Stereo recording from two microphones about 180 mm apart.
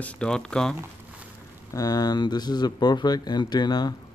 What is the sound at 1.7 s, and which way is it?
Speech, 20° left (ahead or behind).